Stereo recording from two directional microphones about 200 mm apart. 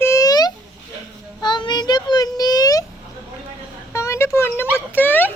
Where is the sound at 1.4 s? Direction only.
20° left (ahead or behind).